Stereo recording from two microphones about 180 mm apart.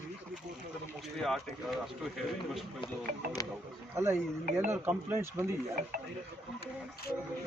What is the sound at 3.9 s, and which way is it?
Speech, 15° right (ahead or behind).